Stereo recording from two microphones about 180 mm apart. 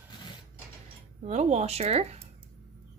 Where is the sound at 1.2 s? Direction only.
40° right (ahead or behind).